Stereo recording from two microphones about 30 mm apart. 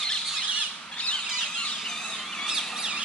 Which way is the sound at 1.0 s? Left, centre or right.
Left.